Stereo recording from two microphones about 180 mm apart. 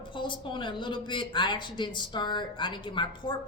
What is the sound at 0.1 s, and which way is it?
Speech, 25° left (ahead or behind).